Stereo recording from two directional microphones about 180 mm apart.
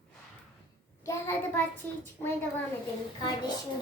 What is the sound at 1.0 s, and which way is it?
Child singing, 10° left (ahead or behind).